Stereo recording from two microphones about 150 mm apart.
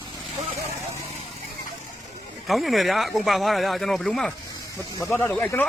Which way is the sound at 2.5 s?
Centre (ahead or behind).